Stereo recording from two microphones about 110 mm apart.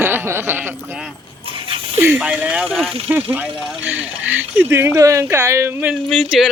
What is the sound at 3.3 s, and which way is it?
Speech, 10° right (ahead or behind).